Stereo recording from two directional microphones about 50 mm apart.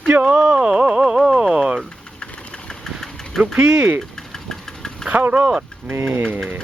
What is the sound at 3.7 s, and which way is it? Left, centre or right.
Speech, right.